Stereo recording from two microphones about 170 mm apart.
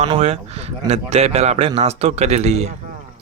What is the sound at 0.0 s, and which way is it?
Speech, 35° right (ahead or behind).